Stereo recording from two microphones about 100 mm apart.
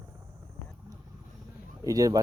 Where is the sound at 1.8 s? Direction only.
35° right (ahead or behind).